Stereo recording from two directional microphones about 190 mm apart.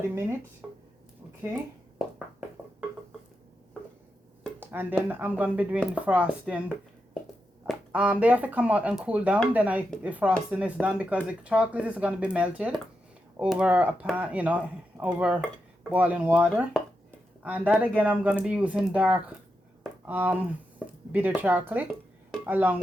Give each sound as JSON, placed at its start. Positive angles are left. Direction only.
{"t": 0.1, "sound": "speech", "side_deg": -15}
{"t": 0.6, "sound": "a sound", "side_deg": -5}
{"t": 4.6, "sound": "speech", "side_deg": -10}
{"t": 7.7, "sound": "speech", "side_deg": -5}